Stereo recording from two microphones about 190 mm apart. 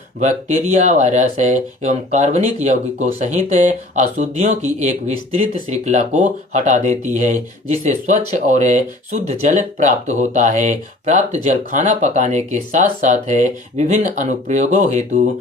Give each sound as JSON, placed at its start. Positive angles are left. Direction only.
{"t": 0.2, "sound": "speech", "side_deg": -40}